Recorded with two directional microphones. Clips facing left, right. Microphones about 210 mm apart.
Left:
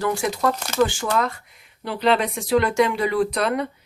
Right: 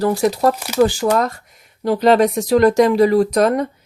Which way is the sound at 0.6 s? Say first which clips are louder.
Right 6 dB; 10° right (ahead or behind).